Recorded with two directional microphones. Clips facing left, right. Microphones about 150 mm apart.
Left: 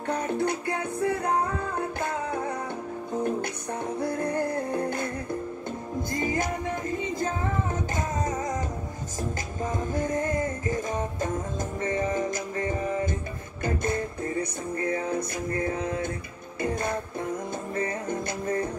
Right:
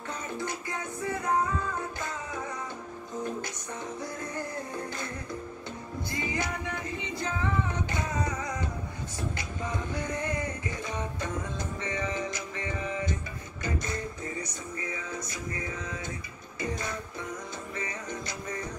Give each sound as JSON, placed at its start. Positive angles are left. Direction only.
{"t": 0.1, "sound": "music", "side_deg": 60}
{"t": 6.1, "sound": "music", "side_deg": 45}